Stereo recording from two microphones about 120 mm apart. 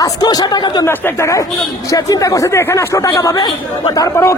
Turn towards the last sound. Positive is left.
turn(degrees=25)  # may be behind; listen again after turning